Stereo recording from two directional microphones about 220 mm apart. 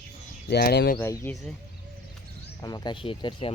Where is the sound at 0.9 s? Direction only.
10° left (ahead or behind).